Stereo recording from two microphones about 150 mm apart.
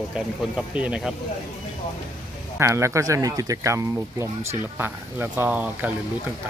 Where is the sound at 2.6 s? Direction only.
20° right (ahead or behind).